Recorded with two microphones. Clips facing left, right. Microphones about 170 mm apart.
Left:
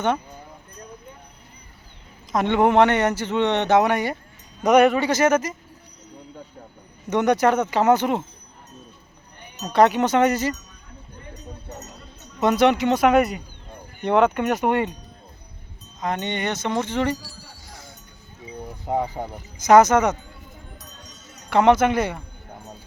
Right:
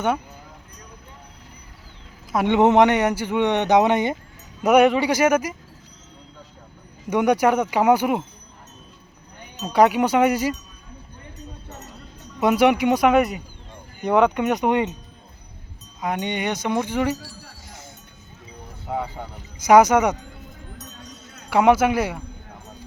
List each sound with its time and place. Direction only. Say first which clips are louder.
2.3 s speech: right 1 dB; 10° right (ahead or behind)
4.6 s speech: even; 10° right (ahead or behind)
7.1 s speech: even; 10° right (ahead or behind)
9.7 s speech: even; 10° right (ahead or behind)
12.4 s speech: right 1 dB; 10° right (ahead or behind)
16.0 s speech: right 1 dB; 10° right (ahead or behind)
18.9 s speech: left 3 dB; 35° left (ahead or behind)
19.5 s speech: even; 10° right (ahead or behind)
21.5 s speech: even; 10° right (ahead or behind)